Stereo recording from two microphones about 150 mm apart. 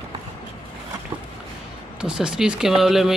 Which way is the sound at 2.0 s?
5° right (ahead or behind).